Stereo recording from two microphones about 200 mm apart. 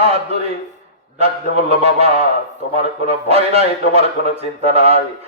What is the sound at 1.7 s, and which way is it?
A man's voice, 30° right (ahead or behind).